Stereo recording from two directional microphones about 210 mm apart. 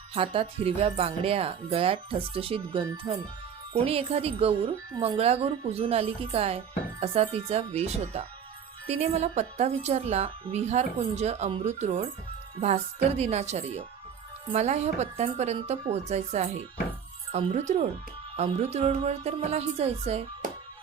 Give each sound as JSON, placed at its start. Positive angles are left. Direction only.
{"t": 0.1, "sound": "speech", "side_deg": -25}